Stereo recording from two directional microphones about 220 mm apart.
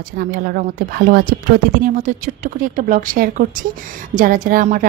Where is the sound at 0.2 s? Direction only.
40° right (ahead or behind).